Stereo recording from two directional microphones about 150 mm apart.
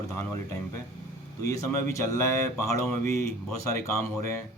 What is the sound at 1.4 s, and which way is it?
Speech, 20° left (ahead or behind).